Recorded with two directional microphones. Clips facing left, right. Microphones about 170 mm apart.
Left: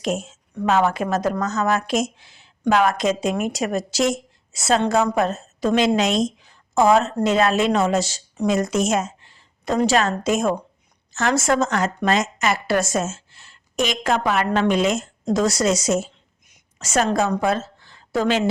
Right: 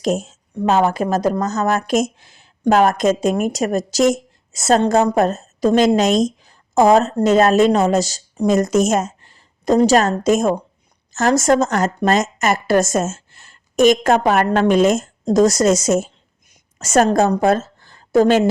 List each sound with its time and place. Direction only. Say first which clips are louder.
0.0 s a woman's voice: right 5 dB; 40° right (ahead or behind)